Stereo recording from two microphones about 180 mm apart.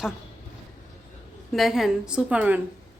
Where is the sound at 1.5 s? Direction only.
Centre (ahead or behind).